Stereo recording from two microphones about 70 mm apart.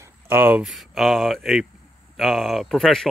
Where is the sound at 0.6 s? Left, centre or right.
Centre.